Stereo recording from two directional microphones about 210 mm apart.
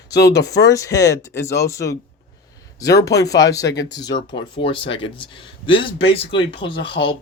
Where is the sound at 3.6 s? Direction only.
55° left (ahead or behind).